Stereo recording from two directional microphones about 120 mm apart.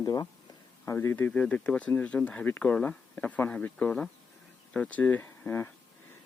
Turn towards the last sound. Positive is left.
turn(degrees=15)  # may be behind; listen again after turning